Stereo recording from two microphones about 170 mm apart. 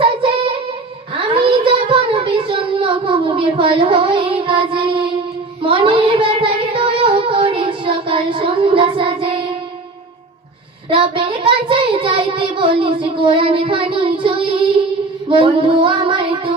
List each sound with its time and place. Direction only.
0.0 s child singing: 30° right (ahead or behind)
10.8 s child singing: 30° right (ahead or behind)